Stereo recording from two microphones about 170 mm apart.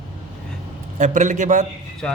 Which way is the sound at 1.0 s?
50° right (ahead or behind).